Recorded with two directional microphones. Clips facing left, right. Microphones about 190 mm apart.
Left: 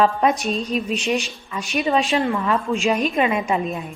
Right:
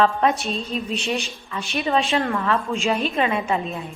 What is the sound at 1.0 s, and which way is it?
Speech, 35° right (ahead or behind).